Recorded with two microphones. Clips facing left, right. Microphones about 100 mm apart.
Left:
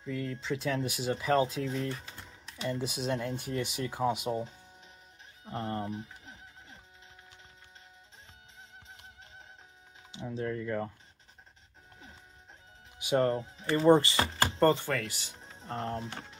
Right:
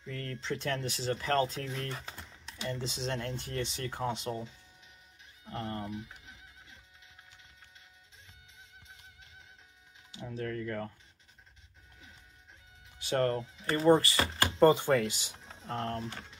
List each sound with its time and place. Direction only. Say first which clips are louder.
0.0 s speech: left 4 dB; 5° left (ahead or behind)
5.4 s music: left 3 dB; 30° left (ahead or behind)
10.3 s speech: left 3 dB; 20° left (ahead or behind)
13.0 s speech: left 2 dB; 10° left (ahead or behind)
13.9 s speech: left 2 dB; 25° left (ahead or behind)
14.7 s speech: right 3 dB; 15° right (ahead or behind)
15.6 s speech: even; centre (ahead or behind)